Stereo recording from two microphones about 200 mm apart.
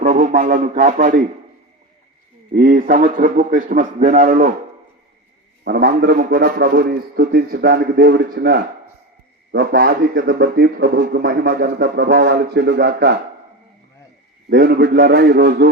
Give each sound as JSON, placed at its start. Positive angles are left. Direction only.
{"t": 0.0, "sound": "a man's voice", "side_deg": -35}
{"t": 2.6, "sound": "a man's voice", "side_deg": -45}
{"t": 5.6, "sound": "a man's voice", "side_deg": -50}
{"t": 14.5, "sound": "a man's voice", "side_deg": -50}